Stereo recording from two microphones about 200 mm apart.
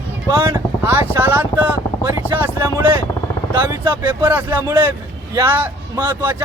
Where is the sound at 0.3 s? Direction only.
15° right (ahead or behind).